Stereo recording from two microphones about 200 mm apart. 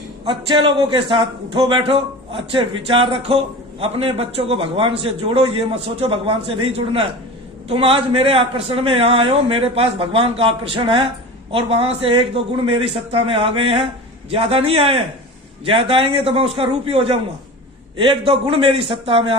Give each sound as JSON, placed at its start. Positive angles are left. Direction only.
{"t": 0.3, "sound": "a man's voice", "side_deg": -25}